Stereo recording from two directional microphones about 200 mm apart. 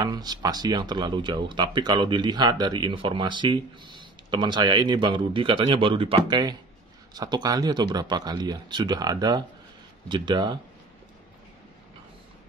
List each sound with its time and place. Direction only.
0.0 s speech: 20° right (ahead or behind)